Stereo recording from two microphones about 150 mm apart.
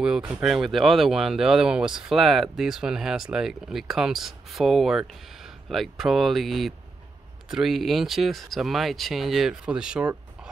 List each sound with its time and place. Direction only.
0.0 s speech: 5° right (ahead or behind)